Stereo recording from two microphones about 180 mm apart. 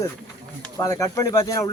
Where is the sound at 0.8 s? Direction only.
20° left (ahead or behind).